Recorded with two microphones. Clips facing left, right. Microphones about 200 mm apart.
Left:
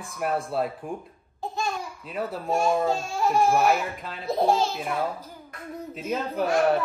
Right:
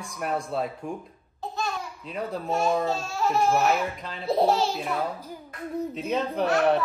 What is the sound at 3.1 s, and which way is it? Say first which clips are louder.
Speech: left 1 dB; 15° left (ahead or behind).